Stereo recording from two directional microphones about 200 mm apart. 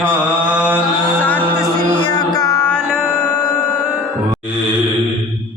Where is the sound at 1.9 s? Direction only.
25° left (ahead or behind).